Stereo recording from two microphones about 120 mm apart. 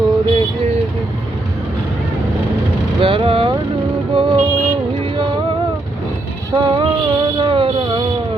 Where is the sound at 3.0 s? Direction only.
50° right (ahead or behind).